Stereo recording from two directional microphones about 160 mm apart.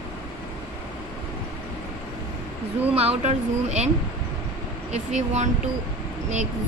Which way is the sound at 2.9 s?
40° right (ahead or behind).